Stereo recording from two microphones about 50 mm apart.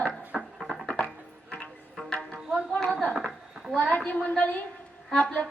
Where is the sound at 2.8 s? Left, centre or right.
Centre.